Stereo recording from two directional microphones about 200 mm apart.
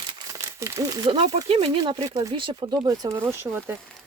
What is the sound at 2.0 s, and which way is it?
Speech, 15° right (ahead or behind).